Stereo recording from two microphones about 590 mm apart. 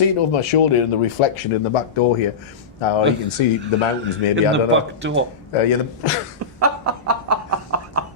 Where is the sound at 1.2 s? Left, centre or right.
Left.